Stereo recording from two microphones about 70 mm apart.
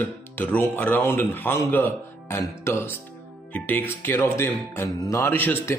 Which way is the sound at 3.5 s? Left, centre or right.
Left.